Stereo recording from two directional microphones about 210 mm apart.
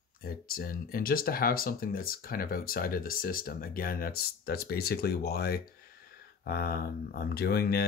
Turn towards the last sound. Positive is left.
turn(degrees=50)  # may be behind; listen again after turning